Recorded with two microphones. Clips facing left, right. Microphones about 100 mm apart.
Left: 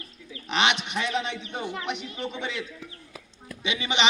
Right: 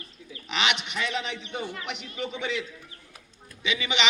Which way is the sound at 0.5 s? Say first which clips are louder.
Left 3 dB; 30° left (ahead or behind).